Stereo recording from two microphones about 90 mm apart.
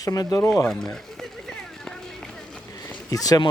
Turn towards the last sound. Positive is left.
turn(degrees=40)  # may be behind; listen again after turning